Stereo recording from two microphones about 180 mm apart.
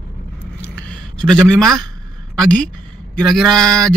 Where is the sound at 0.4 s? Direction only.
5° left (ahead or behind).